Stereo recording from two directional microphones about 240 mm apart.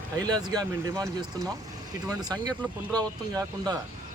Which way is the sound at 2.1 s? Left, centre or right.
Centre.